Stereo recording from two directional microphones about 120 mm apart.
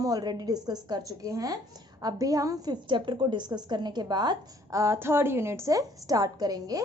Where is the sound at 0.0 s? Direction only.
35° right (ahead or behind).